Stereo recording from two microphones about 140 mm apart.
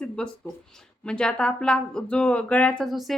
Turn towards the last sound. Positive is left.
turn(degrees=0)  # may be behind; listen again after turning